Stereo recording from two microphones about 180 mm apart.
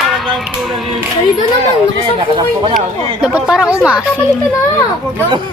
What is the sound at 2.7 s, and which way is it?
Speech, 5° right (ahead or behind).